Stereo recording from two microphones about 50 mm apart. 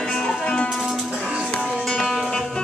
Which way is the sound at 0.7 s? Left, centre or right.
Centre.